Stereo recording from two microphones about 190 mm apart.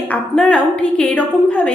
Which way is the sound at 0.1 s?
5° left (ahead or behind).